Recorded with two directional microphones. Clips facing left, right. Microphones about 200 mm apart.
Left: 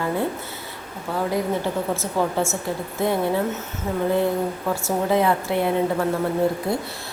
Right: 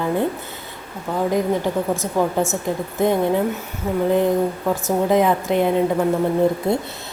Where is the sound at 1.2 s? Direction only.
15° right (ahead or behind).